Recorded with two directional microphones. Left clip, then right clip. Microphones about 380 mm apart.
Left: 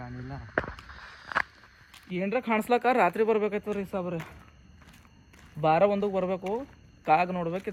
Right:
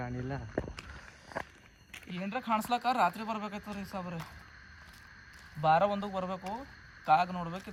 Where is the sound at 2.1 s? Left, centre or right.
Centre.